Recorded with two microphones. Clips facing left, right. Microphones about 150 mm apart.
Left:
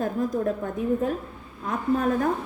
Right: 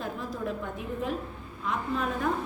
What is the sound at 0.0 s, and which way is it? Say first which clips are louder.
A woman's voice: left 9 dB; 45° left (ahead or behind).